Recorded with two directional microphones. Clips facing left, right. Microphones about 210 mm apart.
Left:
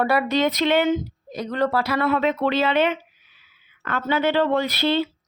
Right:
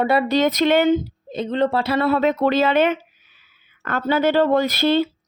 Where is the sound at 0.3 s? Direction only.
40° right (ahead or behind).